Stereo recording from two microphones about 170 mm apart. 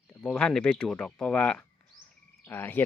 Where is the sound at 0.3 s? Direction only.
5° left (ahead or behind).